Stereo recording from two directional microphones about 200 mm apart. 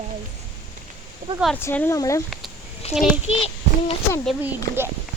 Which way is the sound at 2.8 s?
30° left (ahead or behind).